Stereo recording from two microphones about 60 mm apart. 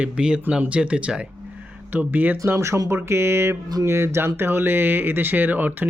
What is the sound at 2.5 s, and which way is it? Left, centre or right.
Speech, right.